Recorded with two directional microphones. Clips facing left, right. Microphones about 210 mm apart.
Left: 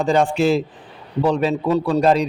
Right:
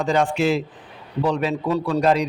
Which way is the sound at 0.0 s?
30° left (ahead or behind).